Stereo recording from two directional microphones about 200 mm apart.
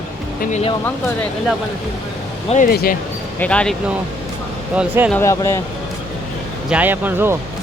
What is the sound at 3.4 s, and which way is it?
Speech, 5° left (ahead or behind).